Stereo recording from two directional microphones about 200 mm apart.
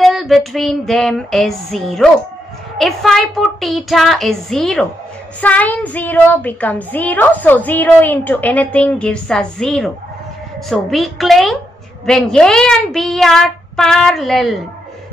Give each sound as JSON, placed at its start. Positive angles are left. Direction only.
{"t": 0.0, "sound": "speech", "side_deg": 0}